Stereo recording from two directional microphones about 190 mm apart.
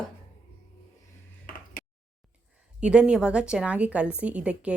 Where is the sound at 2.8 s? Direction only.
5° right (ahead or behind).